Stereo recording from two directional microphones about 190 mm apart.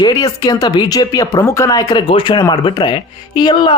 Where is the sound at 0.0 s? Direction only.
20° left (ahead or behind).